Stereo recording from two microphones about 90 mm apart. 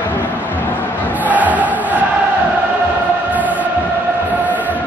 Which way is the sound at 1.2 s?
20° right (ahead or behind).